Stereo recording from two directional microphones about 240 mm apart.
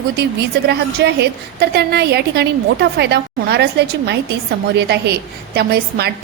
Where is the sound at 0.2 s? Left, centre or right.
Right.